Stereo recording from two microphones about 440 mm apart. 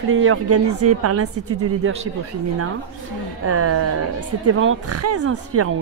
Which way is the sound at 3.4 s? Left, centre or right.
Right.